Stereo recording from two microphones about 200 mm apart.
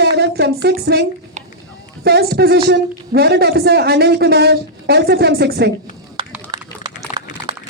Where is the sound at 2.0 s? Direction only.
55° right (ahead or behind).